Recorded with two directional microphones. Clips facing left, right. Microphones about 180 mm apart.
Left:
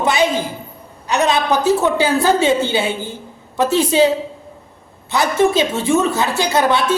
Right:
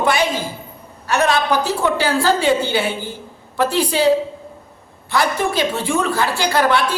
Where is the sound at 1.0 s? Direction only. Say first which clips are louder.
Left 1 dB; 20° left (ahead or behind).